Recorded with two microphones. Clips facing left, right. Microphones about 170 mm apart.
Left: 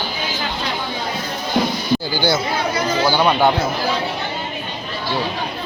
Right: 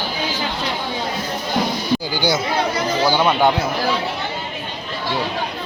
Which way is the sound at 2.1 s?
15° right (ahead or behind).